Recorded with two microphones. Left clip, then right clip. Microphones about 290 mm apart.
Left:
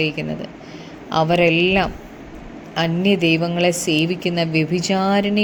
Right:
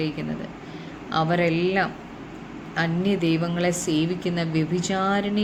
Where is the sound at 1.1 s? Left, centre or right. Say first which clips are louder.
Left 7 dB; left.